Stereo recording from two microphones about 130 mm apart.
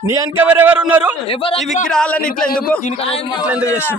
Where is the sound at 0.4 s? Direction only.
15° right (ahead or behind).